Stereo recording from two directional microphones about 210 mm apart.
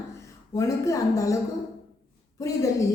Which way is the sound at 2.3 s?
15° left (ahead or behind).